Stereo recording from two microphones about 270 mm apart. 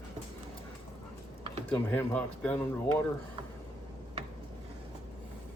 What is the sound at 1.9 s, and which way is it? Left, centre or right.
Speech, centre.